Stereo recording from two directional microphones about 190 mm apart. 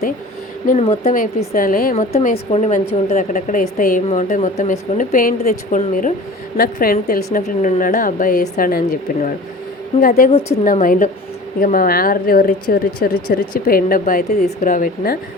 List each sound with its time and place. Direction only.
0.7 s a woman's voice: 35° left (ahead or behind)
2.1 s a woman's voice: 35° left (ahead or behind); by 15.2 s 50° left (ahead or behind)